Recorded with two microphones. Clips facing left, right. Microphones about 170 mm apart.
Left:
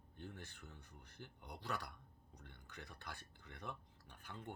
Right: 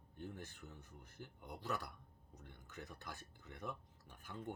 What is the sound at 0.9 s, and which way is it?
Speech, 45° right (ahead or behind).